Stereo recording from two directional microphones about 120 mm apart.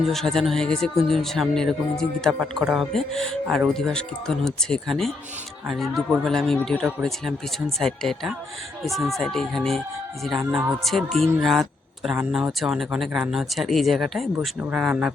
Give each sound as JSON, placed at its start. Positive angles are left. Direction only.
{"t": 0.0, "sound": "a man's voice", "side_deg": 0}
{"t": 14.3, "sound": "speech", "side_deg": -15}